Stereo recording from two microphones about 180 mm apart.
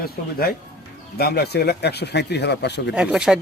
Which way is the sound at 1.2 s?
60° left (ahead or behind).